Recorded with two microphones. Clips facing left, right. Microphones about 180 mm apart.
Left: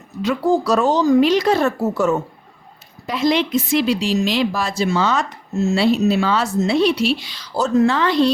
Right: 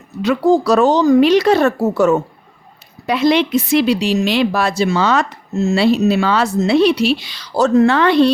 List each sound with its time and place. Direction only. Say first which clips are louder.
0.2 s a woman's voice: right 4 dB; 75° right (ahead or behind)